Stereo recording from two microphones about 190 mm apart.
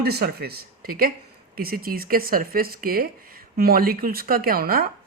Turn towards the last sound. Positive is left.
turn(degrees=-50)  # may be behind; listen again after turning